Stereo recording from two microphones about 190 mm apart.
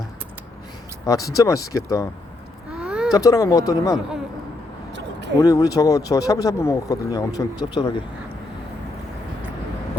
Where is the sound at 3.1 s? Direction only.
20° left (ahead or behind).